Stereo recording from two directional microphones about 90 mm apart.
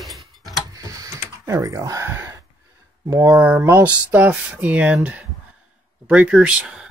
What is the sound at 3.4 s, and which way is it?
Speech, 15° right (ahead or behind).